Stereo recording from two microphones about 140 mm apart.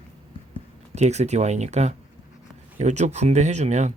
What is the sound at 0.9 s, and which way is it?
Speech, 55° right (ahead or behind).